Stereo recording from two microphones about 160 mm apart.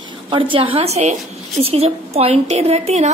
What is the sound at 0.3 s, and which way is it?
A woman's voice, 35° right (ahead or behind).